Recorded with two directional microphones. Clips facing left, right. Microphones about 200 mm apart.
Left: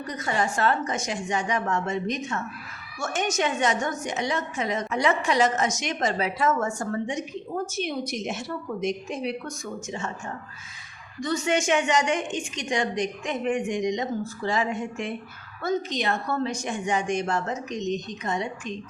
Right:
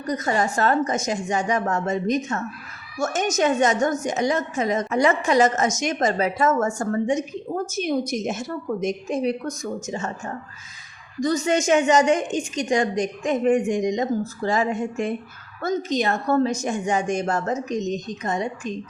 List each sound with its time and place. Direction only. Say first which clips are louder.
0.1 s a woman's voice: right 5 dB; 40° right (ahead or behind)
11.2 s a woman's voice: right 4 dB; 40° right (ahead or behind)